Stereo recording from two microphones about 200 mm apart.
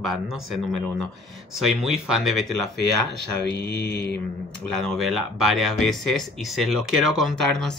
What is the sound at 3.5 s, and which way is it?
Mantra, 55° left (ahead or behind).